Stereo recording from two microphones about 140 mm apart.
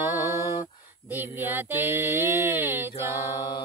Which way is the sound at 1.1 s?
15° right (ahead or behind).